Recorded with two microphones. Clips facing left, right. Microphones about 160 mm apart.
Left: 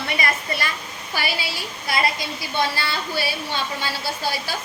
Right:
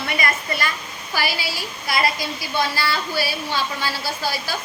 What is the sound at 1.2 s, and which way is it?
A woman's voice, 25° left (ahead or behind).